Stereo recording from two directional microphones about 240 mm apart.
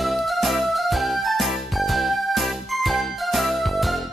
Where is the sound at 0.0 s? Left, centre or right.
Centre.